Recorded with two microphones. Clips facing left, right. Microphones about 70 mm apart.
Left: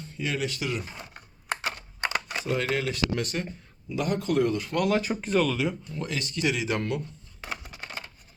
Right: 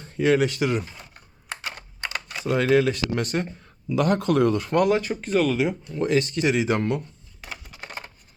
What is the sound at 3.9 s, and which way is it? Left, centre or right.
Speech, right.